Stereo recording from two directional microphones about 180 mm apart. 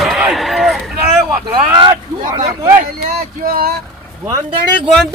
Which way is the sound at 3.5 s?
55° right (ahead or behind).